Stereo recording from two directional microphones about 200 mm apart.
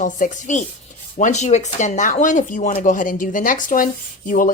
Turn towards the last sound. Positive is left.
turn(degrees=40)  # may be behind; listen again after turning